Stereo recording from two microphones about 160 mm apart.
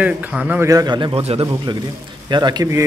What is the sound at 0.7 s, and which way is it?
A man's voice, 25° right (ahead or behind).